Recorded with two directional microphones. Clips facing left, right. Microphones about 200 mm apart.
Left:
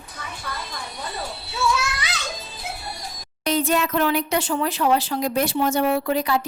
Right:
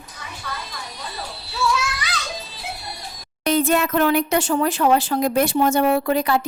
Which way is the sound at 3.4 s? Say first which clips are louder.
Right 3 dB; 55° right (ahead or behind).